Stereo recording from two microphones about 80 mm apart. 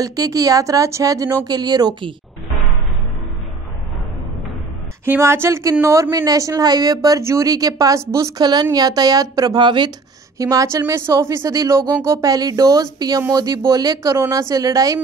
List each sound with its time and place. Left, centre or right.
0.0 s speech: right
5.2 s speech: right
8.4 s a woman's voice: right
10.4 s speech: right